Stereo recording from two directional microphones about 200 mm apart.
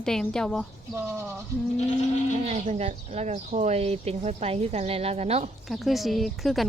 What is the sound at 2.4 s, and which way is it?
Speech, 30° right (ahead or behind).